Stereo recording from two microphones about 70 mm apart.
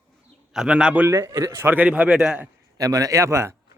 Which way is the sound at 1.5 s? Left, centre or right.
Right.